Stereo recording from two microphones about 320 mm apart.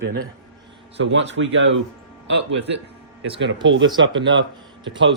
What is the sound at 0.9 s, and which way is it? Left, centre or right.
Speech, right.